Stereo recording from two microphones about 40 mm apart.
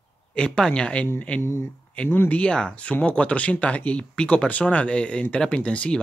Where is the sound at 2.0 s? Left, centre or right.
Left.